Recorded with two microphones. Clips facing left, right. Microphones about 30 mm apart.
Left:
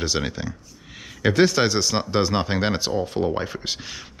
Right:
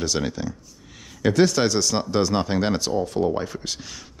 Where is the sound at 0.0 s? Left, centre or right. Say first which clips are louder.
Even; centre.